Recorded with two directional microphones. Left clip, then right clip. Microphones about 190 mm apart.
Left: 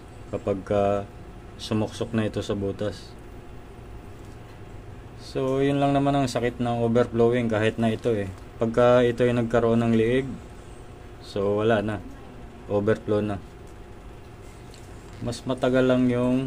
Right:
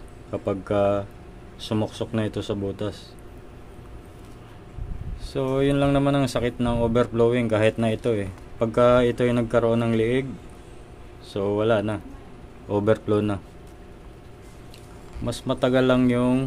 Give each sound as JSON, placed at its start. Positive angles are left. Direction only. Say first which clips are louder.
{"t": 0.3, "sound": "speech", "louder": "even", "side_deg": -10}
{"t": 5.3, "sound": "speech", "louder": "right 1 dB", "side_deg": -15}
{"t": 11.3, "sound": "speech", "louder": "right 1 dB", "side_deg": -10}
{"t": 15.2, "sound": "speech", "louder": "right 2 dB", "side_deg": -20}